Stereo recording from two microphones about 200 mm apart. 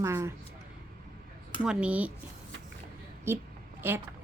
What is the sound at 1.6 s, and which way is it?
Speech, 5° right (ahead or behind).